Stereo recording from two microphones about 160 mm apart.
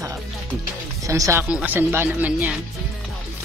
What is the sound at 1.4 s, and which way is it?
Speech, 10° right (ahead or behind).